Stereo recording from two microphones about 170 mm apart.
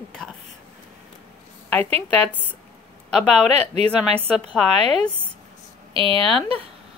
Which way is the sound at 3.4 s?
40° right (ahead or behind).